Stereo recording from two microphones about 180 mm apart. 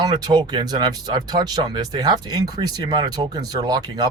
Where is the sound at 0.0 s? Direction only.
25° right (ahead or behind).